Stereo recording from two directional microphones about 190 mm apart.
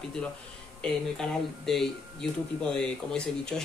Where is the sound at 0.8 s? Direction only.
Centre (ahead or behind).